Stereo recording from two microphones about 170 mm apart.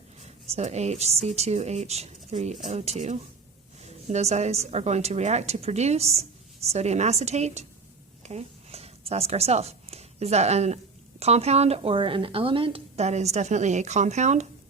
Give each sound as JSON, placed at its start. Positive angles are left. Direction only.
{"t": 0.2, "sound": "a woman's voice", "side_deg": -40}
{"t": 8.2, "sound": "a sound", "side_deg": -40}
{"t": 11.2, "sound": "a woman's voice", "side_deg": -40}